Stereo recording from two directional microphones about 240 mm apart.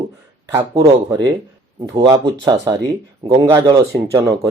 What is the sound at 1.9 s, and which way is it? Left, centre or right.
A man's voice, centre.